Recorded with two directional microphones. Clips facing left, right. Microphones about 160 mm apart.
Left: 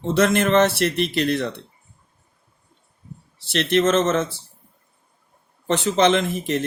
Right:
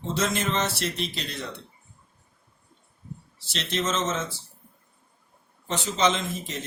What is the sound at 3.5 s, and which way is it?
Speech, 65° left (ahead or behind).